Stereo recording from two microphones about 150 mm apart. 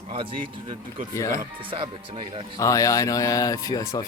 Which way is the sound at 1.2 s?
20° left (ahead or behind).